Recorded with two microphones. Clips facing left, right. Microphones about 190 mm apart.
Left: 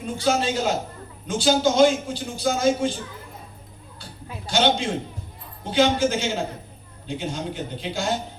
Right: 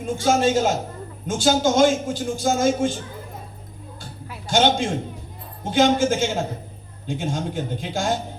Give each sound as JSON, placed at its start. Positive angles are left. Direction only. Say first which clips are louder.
{"t": 0.0, "sound": "a man's voice", "louder": "right 3 dB", "side_deg": -50}
{"t": 4.4, "sound": "a man's voice", "louder": "right 2 dB", "side_deg": -50}